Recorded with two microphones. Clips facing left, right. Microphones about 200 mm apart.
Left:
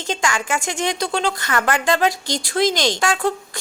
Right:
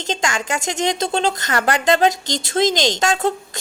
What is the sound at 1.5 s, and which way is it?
Speech, 35° right (ahead or behind).